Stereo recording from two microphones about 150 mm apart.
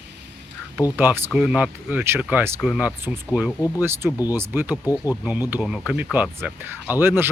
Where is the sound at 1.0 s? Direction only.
10° right (ahead or behind).